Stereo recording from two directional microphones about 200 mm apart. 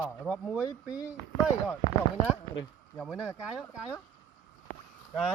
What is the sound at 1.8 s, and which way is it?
Speech, 20° left (ahead or behind).